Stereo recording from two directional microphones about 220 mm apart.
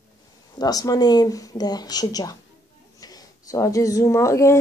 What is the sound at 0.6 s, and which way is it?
Speech, 15° left (ahead or behind).